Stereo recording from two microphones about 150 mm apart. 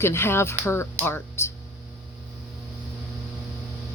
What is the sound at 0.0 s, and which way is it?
Speech, 15° left (ahead or behind).